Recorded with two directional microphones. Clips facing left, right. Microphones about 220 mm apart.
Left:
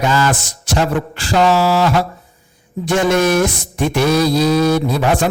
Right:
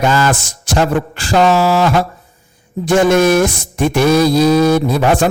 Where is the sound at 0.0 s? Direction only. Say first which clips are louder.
Right 2 dB; 50° right (ahead or behind).